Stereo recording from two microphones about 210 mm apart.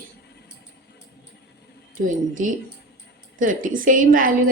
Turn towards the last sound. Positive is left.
turn(degrees=-40)  # may be behind; listen again after turning